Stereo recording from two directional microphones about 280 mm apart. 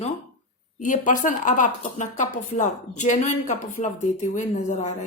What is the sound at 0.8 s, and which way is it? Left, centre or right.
Speech, left.